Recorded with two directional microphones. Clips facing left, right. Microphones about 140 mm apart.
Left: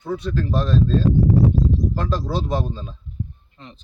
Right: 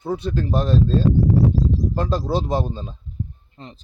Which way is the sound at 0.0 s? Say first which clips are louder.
Right 1 dB; 25° right (ahead or behind).